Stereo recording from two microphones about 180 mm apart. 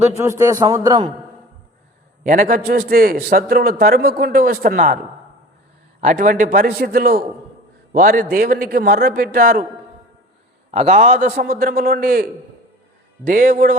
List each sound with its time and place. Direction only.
0.2 s a man's voice: 15° right (ahead or behind)
2.2 s a man's voice: 45° right (ahead or behind)
6.0 s a man's voice: 45° right (ahead or behind)
10.7 s a man's voice: 40° right (ahead or behind)